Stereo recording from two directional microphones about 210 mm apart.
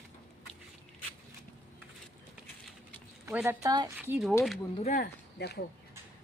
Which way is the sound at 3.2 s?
10° right (ahead or behind).